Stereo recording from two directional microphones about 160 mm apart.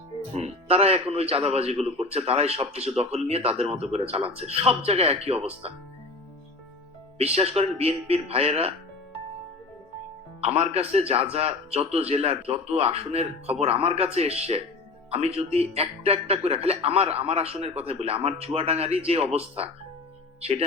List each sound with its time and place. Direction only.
0.3 s speech: 40° right (ahead or behind)
7.3 s speech: 40° right (ahead or behind)
10.4 s speech: 35° right (ahead or behind)